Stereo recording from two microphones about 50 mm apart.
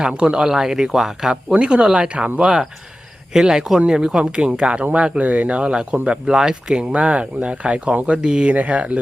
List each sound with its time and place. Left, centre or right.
0.1 s speech: right
1.5 s speech: right
3.3 s speech: centre
6.9 s speech: right